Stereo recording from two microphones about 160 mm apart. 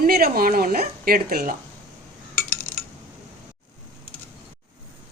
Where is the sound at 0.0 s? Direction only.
70° right (ahead or behind).